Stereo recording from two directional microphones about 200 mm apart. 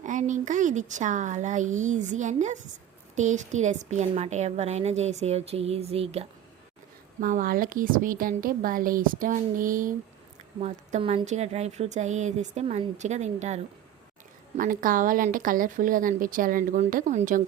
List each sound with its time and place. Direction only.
0.0 s a woman's voice: 40° right (ahead or behind)
7.2 s a woman's voice: 45° right (ahead or behind)
14.6 s speech: 45° right (ahead or behind)